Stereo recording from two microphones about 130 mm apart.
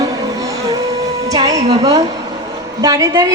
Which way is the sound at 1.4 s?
30° right (ahead or behind).